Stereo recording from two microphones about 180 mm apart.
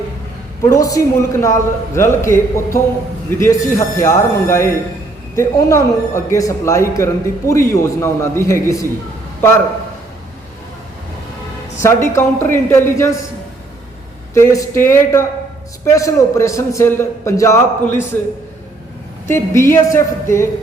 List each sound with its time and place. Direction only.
0.6 s a man's voice: 20° left (ahead or behind)
11.8 s a man's voice: 15° left (ahead or behind)
14.3 s a man's voice: 15° left (ahead or behind)
19.3 s a man's voice: 15° left (ahead or behind)